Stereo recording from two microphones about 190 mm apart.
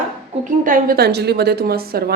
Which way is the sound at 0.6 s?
50° right (ahead or behind).